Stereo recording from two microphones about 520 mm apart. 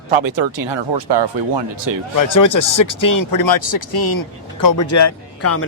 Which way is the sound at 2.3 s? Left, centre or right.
Left.